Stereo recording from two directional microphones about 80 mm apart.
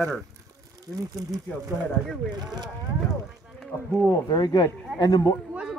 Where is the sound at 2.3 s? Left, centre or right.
Right.